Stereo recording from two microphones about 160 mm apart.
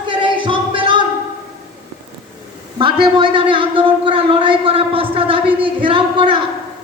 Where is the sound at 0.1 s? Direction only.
30° right (ahead or behind).